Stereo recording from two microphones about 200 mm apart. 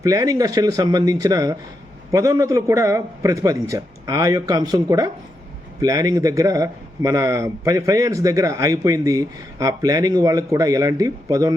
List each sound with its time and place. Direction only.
0.0 s a man's voice: 15° right (ahead or behind)